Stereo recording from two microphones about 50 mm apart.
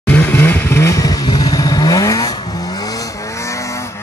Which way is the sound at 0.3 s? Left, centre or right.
Left.